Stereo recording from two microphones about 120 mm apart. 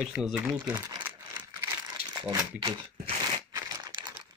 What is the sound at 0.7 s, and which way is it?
Crumpling, 15° right (ahead or behind).